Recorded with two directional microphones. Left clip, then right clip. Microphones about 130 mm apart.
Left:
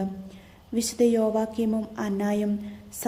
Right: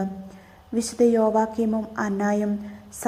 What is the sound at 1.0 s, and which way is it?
Speech, centre (ahead or behind).